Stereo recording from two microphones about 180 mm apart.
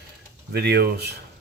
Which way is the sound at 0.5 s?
65° right (ahead or behind).